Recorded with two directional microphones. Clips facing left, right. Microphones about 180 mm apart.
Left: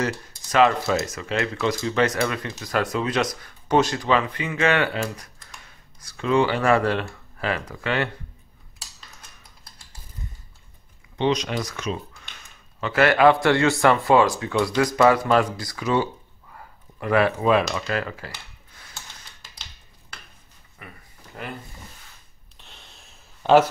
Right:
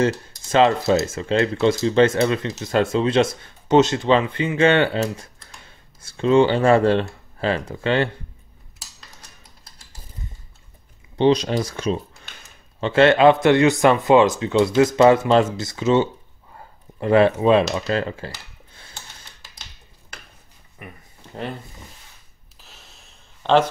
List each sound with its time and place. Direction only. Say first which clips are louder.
0.0 s speech: right 6 dB; 25° right (ahead or behind)
11.1 s speech: right 6 dB; 30° right (ahead or behind)
16.5 s cutlery: right 4 dB; 25° right (ahead or behind)
20.8 s speech: right 4 dB; 20° right (ahead or behind)
22.6 s a sound: even; centre (ahead or behind)